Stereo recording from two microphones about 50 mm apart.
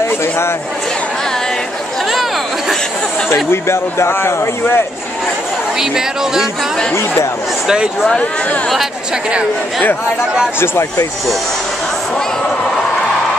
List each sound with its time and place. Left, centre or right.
0.2 s speech: left
3.6 s speech: left
5.8 s speech: centre
7.6 s speech: centre